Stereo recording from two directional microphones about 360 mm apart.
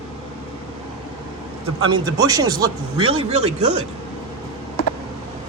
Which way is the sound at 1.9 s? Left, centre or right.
Centre.